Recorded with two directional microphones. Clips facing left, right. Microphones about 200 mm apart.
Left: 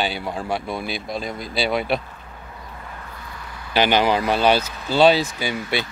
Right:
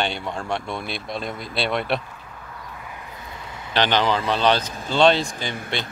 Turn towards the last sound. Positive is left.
turn(degrees=5)  # may be behind; listen again after turning